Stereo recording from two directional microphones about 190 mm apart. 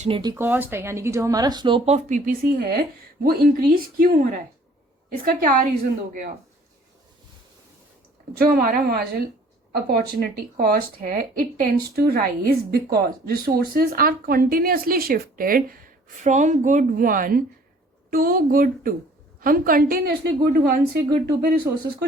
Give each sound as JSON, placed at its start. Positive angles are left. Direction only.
{"t": 0.0, "sound": "speech", "side_deg": -25}
{"t": 8.4, "sound": "speech", "side_deg": -50}